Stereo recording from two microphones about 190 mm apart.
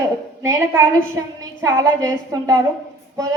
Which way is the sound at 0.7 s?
10° right (ahead or behind).